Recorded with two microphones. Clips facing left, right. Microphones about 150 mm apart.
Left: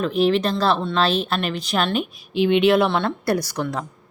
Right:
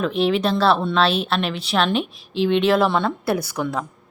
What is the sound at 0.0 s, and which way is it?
Speech, centre (ahead or behind).